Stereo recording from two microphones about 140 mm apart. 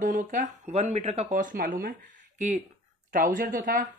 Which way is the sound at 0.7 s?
45° right (ahead or behind).